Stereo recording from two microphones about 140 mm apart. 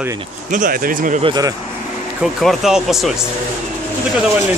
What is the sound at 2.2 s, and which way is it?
Speech, 5° right (ahead or behind).